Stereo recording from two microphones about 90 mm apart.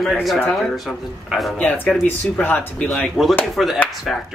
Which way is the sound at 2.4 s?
20° left (ahead or behind).